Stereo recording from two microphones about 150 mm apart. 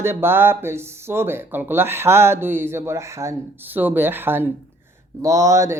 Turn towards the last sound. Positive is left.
turn(degrees=-20)  # may be behind; listen again after turning